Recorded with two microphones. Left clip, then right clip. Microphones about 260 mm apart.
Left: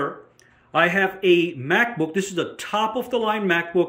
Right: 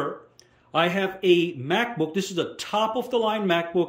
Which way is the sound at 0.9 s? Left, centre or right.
Centre.